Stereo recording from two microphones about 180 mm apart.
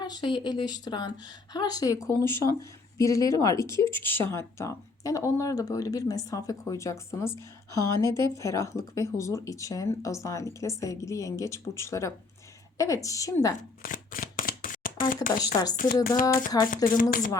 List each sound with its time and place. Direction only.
0.0 s speech: 25° left (ahead or behind)
13.8 s shuffling cards: 50° left (ahead or behind)
15.4 s speech: 20° left (ahead or behind)
15.7 s speech: 50° left (ahead or behind)